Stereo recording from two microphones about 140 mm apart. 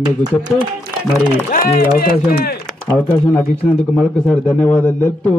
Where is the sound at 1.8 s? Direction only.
90° left.